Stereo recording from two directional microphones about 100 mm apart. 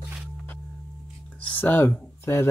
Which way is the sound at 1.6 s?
20° left (ahead or behind).